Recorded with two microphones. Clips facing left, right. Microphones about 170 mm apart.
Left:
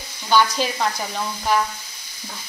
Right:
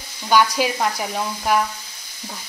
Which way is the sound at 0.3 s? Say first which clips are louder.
Right 1 dB; 10° right (ahead or behind).